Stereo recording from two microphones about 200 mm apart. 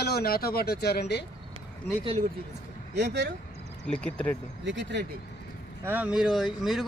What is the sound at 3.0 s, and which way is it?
Speech, 60° right (ahead or behind).